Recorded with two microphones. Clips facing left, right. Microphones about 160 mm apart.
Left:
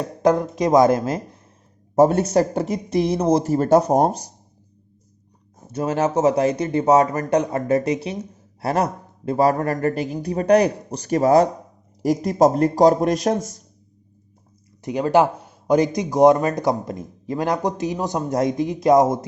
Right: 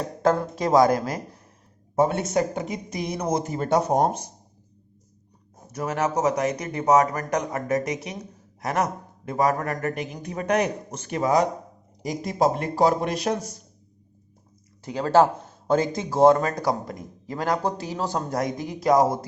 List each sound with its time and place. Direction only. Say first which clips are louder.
0.2 s speech: left 4 dB; 20° left (ahead or behind)
2.0 s a man's voice: left 6 dB; 40° left (ahead or behind)
5.7 s a man's voice: left 5 dB; 30° left (ahead or behind)
14.8 s speech: left 2 dB; 20° left (ahead or behind)